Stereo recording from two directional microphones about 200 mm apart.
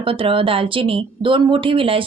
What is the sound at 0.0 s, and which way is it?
Speech, 25° right (ahead or behind).